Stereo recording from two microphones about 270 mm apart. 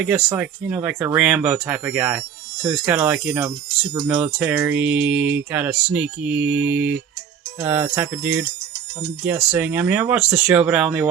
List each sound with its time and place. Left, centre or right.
0.0 s speech: centre